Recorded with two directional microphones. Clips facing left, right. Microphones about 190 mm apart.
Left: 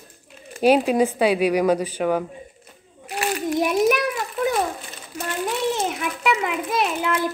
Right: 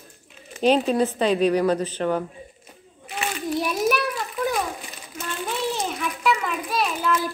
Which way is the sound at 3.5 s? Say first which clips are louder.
Left 5 dB; 20° left (ahead or behind).